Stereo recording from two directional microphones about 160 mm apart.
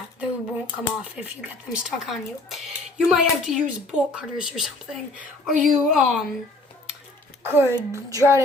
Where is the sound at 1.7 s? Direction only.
5° right (ahead or behind).